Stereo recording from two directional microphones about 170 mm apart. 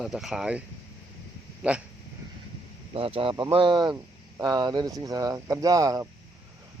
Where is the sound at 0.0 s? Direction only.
Centre (ahead or behind).